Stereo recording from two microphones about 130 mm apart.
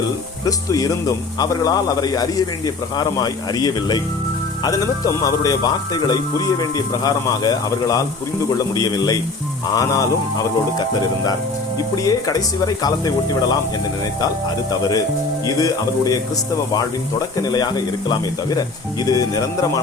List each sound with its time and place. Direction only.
0.4 s a man's voice: 30° left (ahead or behind)
12.0 s speech: 30° left (ahead or behind)
14.7 s speech: 30° left (ahead or behind)
17.3 s a man's voice: 30° left (ahead or behind)